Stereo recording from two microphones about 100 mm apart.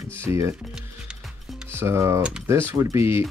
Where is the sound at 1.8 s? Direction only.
25° right (ahead or behind).